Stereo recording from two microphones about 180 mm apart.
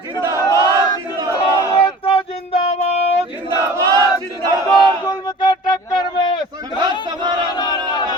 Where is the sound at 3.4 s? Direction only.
20° right (ahead or behind).